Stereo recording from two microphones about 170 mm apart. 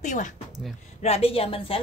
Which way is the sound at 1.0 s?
35° left (ahead or behind).